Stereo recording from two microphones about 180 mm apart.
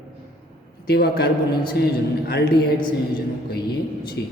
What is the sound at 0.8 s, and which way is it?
Speech, 60° left (ahead or behind).